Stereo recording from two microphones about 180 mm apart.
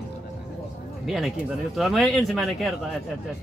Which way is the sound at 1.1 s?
Centre (ahead or behind).